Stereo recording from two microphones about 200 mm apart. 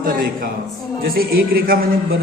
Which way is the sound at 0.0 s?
45° right (ahead or behind).